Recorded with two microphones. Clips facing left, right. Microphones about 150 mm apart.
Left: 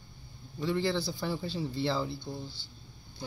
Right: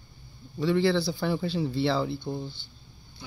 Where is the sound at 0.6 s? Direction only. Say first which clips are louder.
Right 6 dB; 90° right; by 2.7 s 60° right (ahead or behind).